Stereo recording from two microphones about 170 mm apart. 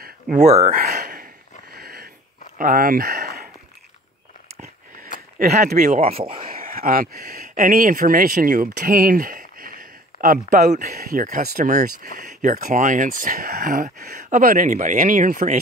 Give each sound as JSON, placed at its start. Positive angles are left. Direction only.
{"t": 0.0, "sound": "a sound", "side_deg": -45}
{"t": 1.7, "sound": "dog", "side_deg": -65}
{"t": 2.6, "sound": "speech", "side_deg": -55}
{"t": 5.9, "sound": "speech", "side_deg": -35}
{"t": 6.4, "sound": "speech", "side_deg": -55}
{"t": 11.0, "sound": "speech", "side_deg": -60}